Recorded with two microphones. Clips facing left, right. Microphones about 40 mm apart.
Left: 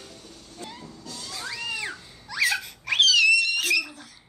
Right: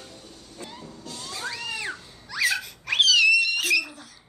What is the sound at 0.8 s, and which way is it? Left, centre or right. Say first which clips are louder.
Vehicle: right 1 dB; right.